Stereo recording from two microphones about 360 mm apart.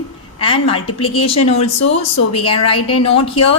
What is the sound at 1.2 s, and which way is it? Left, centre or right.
A woman's voice, left.